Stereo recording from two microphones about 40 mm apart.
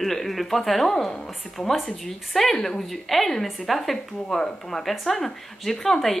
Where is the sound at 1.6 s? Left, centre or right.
Left.